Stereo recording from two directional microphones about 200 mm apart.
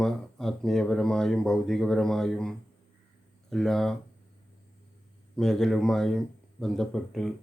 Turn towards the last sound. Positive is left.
turn(degrees=0)  # may be behind; listen again after turning